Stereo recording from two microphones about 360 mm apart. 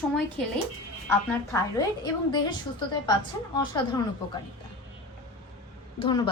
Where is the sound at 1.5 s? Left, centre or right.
Centre.